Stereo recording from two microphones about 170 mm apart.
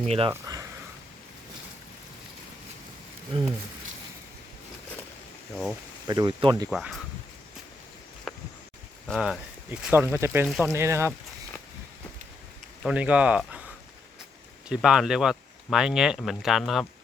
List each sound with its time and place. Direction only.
0.0 s speech: 40° right (ahead or behind)
0.3 s speech: 20° right (ahead or behind)
3.3 s speech: 30° right (ahead or behind)
6.1 s speech: 25° right (ahead or behind)
6.7 s speech: centre (ahead or behind)
8.3 s a sound: 5° left (ahead or behind)
9.0 s speech: centre (ahead or behind)
9.6 s speech: 10° right (ahead or behind)
10.4 s speech: centre (ahead or behind)
10.7 s speech: 15° right (ahead or behind)
12.8 s speech: 5° right (ahead or behind)
14.7 s speech: 5° right (ahead or behind)